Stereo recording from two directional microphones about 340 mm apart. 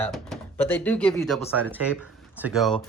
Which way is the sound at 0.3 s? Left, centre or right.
Centre.